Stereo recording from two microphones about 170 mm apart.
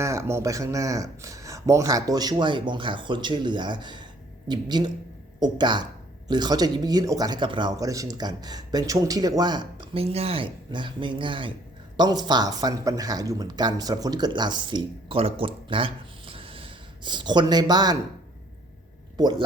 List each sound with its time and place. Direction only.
0.0 s speech: 15° right (ahead or behind)
19.1 s speech: 25° right (ahead or behind)